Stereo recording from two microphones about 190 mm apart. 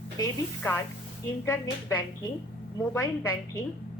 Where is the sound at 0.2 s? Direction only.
15° left (ahead or behind).